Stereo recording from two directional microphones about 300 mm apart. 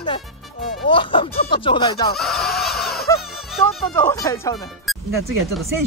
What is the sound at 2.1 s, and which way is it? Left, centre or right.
Fowl, centre.